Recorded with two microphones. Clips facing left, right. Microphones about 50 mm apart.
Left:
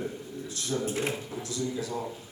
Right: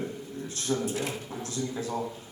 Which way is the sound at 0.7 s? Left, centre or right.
Left.